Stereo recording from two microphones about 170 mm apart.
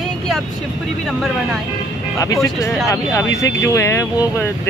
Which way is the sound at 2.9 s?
20° left (ahead or behind).